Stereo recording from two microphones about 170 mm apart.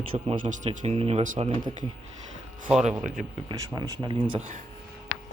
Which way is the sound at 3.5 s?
20° right (ahead or behind).